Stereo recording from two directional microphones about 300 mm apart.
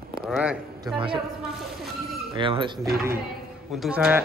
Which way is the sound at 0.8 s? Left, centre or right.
Centre.